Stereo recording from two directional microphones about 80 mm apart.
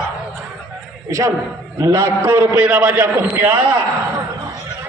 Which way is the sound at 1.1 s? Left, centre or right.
Right.